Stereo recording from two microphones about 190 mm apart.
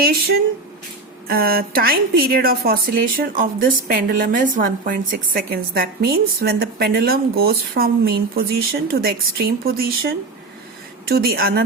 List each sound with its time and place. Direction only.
1.3 s a woman's voice: 50° right (ahead or behind)